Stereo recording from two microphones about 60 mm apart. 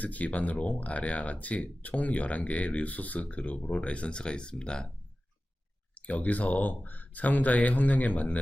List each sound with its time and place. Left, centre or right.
0.0 s speech: left
6.0 s speech: left